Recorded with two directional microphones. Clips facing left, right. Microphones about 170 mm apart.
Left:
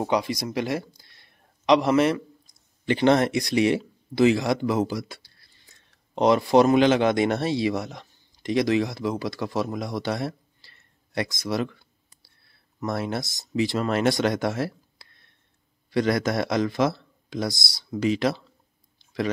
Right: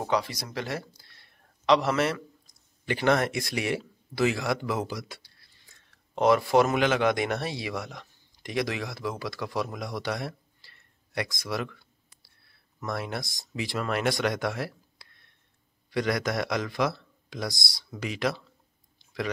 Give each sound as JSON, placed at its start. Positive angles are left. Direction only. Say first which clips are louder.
{"t": 0.0, "sound": "speech", "louder": "left 4 dB", "side_deg": 15}
{"t": 12.8, "sound": "a man's voice", "louder": "left 5 dB", "side_deg": 30}